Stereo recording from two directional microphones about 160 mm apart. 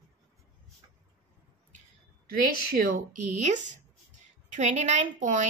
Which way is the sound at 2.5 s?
65° right (ahead or behind).